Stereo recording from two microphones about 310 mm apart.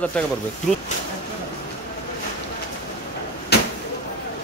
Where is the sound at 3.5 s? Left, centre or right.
Left.